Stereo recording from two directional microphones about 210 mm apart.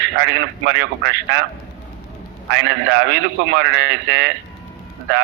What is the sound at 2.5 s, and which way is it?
A man's voice, 55° right (ahead or behind).